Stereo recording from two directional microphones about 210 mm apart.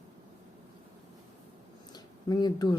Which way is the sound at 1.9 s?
20° left (ahead or behind).